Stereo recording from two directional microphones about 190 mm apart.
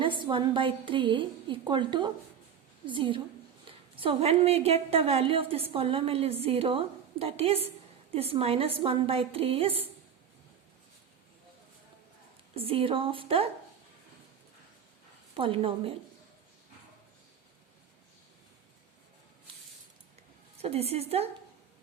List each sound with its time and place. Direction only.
0.0 s a woman's voice: 25° right (ahead or behind)
12.5 s a woman's voice: 30° right (ahead or behind)
15.4 s a woman's voice: 25° right (ahead or behind)
20.6 s a woman's voice: 35° right (ahead or behind)